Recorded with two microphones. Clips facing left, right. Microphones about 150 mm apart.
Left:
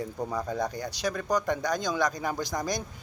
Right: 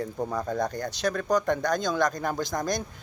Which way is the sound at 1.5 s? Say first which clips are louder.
Right 3 dB; 55° right (ahead or behind).